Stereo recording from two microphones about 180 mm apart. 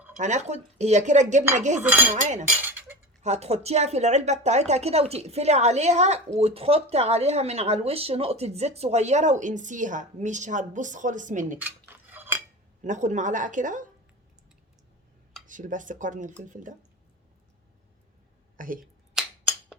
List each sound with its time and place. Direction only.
0.2 s speech: 40° right (ahead or behind)
1.8 s cutlery: 10° right (ahead or behind)
2.1 s speech: 40° right (ahead or behind)
2.5 s a sound: 10° right (ahead or behind)
3.2 s speech: 35° right (ahead or behind)
11.6 s cutlery: 10° right (ahead or behind)
12.8 s a woman's voice: 40° right (ahead or behind)
15.4 s a woman's voice: 45° right (ahead or behind)
18.5 s speech: 50° right (ahead or behind)